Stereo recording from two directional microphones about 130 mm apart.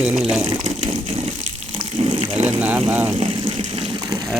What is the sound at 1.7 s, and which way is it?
Frying, 45° right (ahead or behind).